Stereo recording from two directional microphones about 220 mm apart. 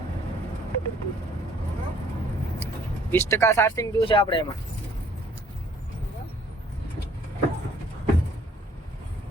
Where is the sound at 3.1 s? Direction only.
10° left (ahead or behind).